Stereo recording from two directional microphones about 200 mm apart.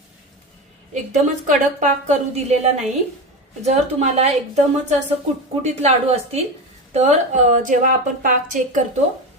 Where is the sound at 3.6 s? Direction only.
35° right (ahead or behind).